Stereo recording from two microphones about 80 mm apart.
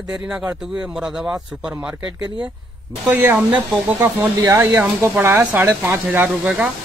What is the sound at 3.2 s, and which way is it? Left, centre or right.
Speech, centre.